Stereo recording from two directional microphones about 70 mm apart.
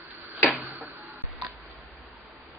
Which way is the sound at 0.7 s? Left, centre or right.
Right.